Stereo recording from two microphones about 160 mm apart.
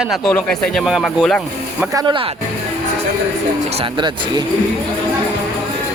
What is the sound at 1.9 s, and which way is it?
Speech, 30° right (ahead or behind).